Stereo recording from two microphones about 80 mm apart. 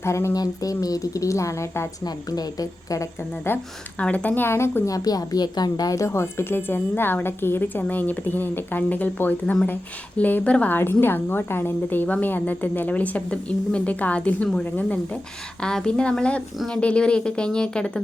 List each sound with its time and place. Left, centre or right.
0.0 s speech: left
0.3 s speech: left
2.0 s speech: left
3.5 s speech: left
3.9 s a woman's voice: centre
11.0 s a woman's voice: left; by 18.0 s centre